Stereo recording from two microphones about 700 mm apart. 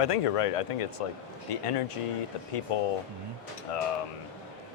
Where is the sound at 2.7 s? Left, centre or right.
Left.